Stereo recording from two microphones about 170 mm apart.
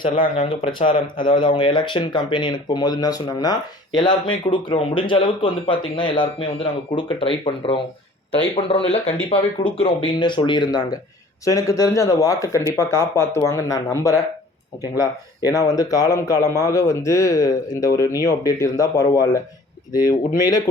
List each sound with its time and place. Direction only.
0.0 s speech: 30° left (ahead or behind)
15.4 s speech: 20° left (ahead or behind)